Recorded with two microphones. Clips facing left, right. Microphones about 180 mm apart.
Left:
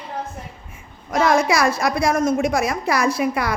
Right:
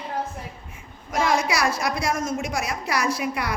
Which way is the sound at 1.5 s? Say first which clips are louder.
Left 5 dB; 55° left (ahead or behind).